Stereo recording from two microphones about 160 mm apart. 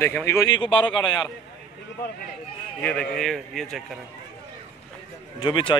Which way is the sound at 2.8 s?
5° left (ahead or behind).